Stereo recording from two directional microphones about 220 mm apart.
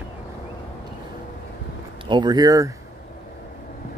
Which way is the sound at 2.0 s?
20° right (ahead or behind).